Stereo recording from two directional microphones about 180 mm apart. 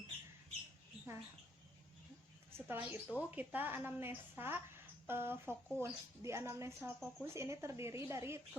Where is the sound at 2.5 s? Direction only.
10° right (ahead or behind).